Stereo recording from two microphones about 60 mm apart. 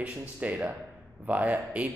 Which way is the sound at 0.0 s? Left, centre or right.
Right.